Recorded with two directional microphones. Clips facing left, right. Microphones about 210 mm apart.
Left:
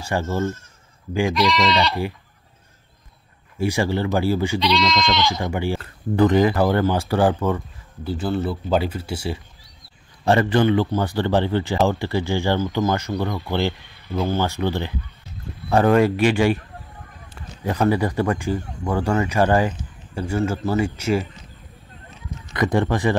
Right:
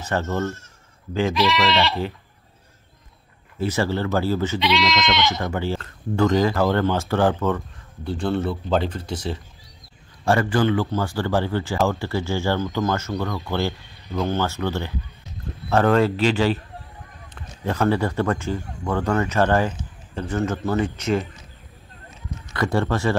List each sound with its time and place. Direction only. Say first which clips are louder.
0.0 s speech: left 1 dB; 10° left (ahead or behind)
1.3 s goat: left 1 dB; centre (ahead or behind)
3.5 s speech: left 1 dB; 15° left (ahead or behind)
4.6 s goat: left 1 dB; centre (ahead or behind)
5.4 s speech: left 1 dB; 15° left (ahead or behind)
10.2 s speech: left 2 dB; 20° left (ahead or behind)
22.5 s speech: left 2 dB; 15° left (ahead or behind)